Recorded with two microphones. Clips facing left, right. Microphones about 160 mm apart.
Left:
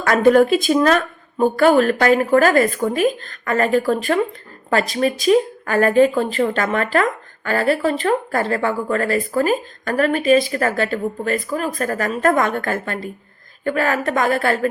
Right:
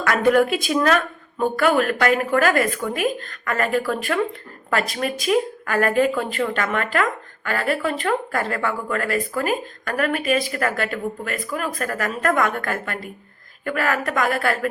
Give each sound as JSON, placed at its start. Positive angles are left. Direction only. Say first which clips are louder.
{"t": 0.3, "sound": "a woman's voice", "louder": "left 5 dB", "side_deg": 30}